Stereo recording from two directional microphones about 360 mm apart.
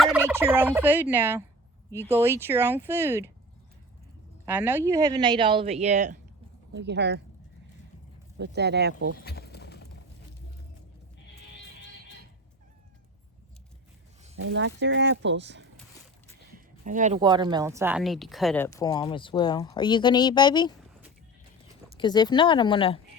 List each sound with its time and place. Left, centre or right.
0.0 s fowl: centre
2.0 s speech: centre
4.4 s speech: centre; by 7.2 s right
8.4 s speech: right
9.2 s clip-clop: left
14.3 s speech: right; by 20.7 s centre
21.9 s speech: centre